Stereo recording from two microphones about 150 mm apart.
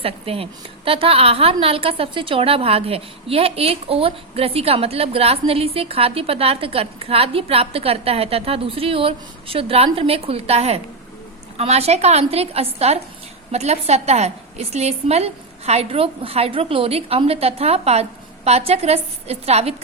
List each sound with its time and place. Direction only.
0.0 s a woman's voice: 40° right (ahead or behind)